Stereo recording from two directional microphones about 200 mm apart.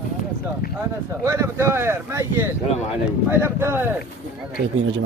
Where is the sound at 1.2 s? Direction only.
15° right (ahead or behind).